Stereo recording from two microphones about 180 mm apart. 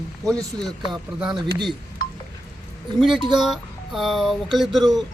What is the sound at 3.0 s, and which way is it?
Speech, centre (ahead or behind).